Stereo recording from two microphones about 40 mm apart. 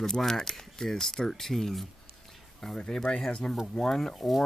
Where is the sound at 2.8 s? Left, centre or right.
Centre.